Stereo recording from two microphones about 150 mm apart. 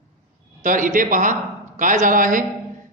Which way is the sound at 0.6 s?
60° right (ahead or behind).